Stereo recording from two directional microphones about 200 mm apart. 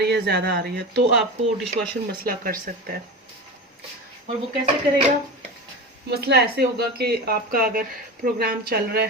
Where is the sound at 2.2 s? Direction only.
45° right (ahead or behind).